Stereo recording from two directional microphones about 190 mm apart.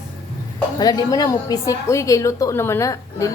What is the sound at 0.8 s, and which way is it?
A woman's voice, 20° left (ahead or behind).